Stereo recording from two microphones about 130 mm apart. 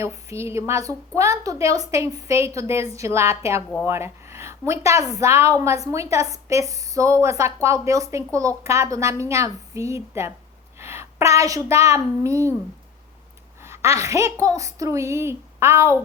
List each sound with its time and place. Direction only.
0.0 s a woman's voice: 20° right (ahead or behind)
10.8 s a sound: 20° right (ahead or behind)
11.9 s a woman's voice: 25° right (ahead or behind)
13.6 s a woman's voice: 20° right (ahead or behind)